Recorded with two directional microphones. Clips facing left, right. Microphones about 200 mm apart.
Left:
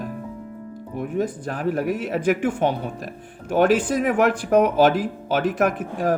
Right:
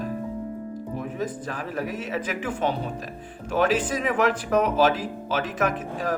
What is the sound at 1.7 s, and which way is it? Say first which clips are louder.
Speech: left 6 dB; 55° left (ahead or behind).